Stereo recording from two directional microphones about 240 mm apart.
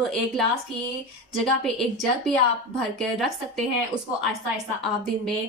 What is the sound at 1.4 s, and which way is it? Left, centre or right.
Speech, centre.